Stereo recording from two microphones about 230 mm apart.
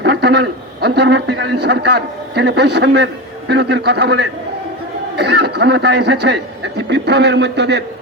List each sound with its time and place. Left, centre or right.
0.0 s a man's voice: right